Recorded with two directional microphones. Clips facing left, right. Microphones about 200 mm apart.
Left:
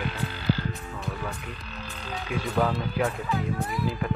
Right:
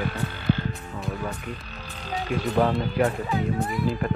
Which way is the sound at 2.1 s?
45° right (ahead or behind).